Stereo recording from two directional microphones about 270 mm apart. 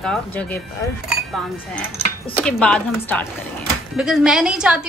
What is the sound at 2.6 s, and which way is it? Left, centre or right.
A woman's voice, centre.